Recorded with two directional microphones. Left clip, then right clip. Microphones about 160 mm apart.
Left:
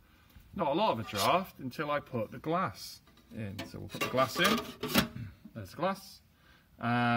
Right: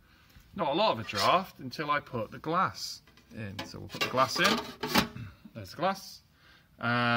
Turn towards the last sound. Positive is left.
turn(degrees=-5)  # may be behind; listen again after turning